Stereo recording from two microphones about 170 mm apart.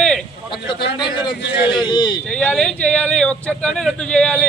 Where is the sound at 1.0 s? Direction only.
25° left (ahead or behind).